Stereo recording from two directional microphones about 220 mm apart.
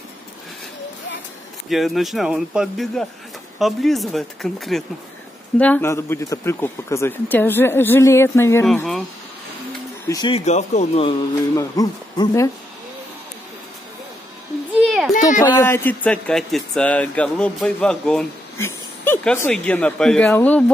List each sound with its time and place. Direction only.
1.7 s speech: centre (ahead or behind)
10.0 s speech: 20° left (ahead or behind)
11.5 s speech: 15° left (ahead or behind)
14.8 s a sound: centre (ahead or behind)
15.1 s a sound: 35° left (ahead or behind)
15.4 s speech: 10° left (ahead or behind)